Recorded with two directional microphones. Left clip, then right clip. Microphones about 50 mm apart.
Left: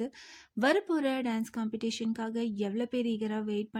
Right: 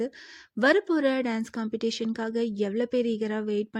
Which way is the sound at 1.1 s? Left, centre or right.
Right.